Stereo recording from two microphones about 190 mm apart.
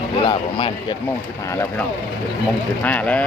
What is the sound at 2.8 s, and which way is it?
Speech, 5° left (ahead or behind).